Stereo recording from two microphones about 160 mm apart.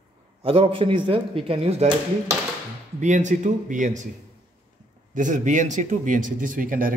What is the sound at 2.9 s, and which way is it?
Speech, 50° right (ahead or behind).